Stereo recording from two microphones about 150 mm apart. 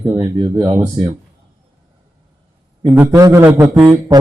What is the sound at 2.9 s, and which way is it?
Speech, 15° right (ahead or behind).